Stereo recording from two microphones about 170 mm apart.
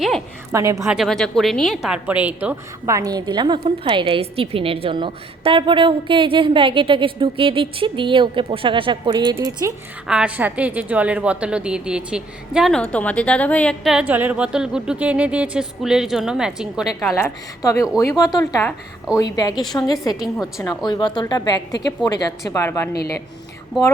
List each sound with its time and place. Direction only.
0.5 s a woman's voice: 20° right (ahead or behind)
0.9 s a woman's voice: centre (ahead or behind); by 9.7 s 20° right (ahead or behind)
10.1 s a woman's voice: 5° right (ahead or behind)
14.0 s a woman's voice: 10° right (ahead or behind)
17.2 s a woman's voice: 15° left (ahead or behind)